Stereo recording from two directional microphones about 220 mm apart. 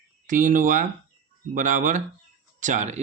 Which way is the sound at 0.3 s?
35° right (ahead or behind).